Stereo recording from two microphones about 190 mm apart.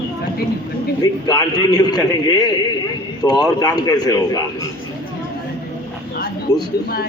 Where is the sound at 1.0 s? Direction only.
20° left (ahead or behind).